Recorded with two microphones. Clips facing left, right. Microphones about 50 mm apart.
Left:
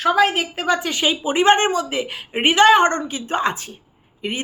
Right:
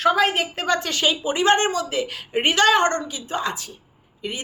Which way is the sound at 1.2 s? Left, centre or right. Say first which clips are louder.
Left 5 dB; left.